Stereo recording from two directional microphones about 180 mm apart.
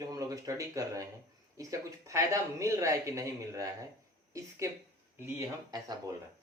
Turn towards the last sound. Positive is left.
turn(degrees=-20)  # may be behind; listen again after turning